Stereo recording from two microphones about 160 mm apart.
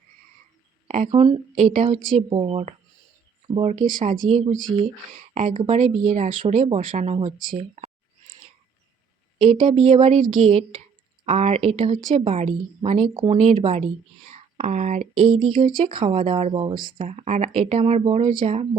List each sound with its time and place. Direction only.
0.9 s a woman's voice: 50° right (ahead or behind)
2.3 s speech: 35° right (ahead or behind)
3.8 s speech: 60° right (ahead or behind)
4.2 s speech: 40° right (ahead or behind)
9.4 s speech: 35° right (ahead or behind)
9.6 s a woman's voice: 50° right (ahead or behind)
15.3 s speech: 30° right (ahead or behind)
17.0 s speech: 40° right (ahead or behind)